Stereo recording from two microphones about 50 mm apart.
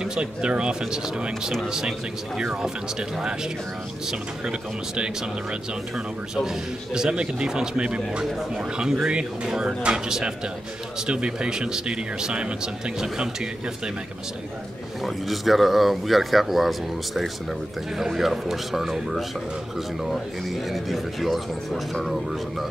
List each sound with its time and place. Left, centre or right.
0.0 s speech: centre
8.3 s speech: centre
8.7 s speech: centre
15.0 s speech: centre